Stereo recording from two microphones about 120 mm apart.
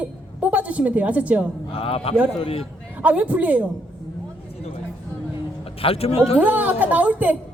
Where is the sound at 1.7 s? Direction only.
50° left (ahead or behind).